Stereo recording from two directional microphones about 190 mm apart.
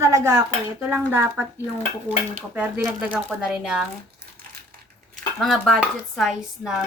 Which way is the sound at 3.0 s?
5° right (ahead or behind).